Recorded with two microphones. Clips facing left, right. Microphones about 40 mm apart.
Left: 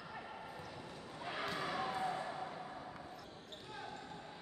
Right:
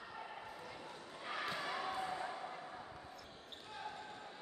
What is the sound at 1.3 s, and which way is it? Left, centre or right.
Basketball bounce, centre.